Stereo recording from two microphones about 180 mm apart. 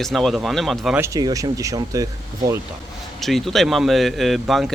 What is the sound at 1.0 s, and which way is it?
Speech, 20° right (ahead or behind).